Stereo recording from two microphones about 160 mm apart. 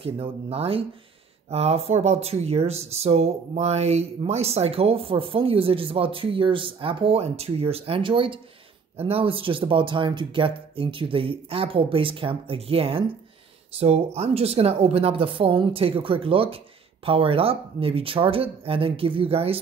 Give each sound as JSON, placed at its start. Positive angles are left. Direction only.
{"t": 0.0, "sound": "speech", "side_deg": -35}